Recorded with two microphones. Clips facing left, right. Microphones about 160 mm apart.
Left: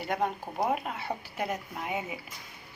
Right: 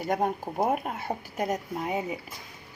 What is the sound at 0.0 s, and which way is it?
Speech, 45° right (ahead or behind).